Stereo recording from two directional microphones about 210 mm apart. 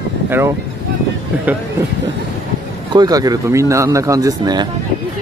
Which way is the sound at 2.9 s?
20° right (ahead or behind).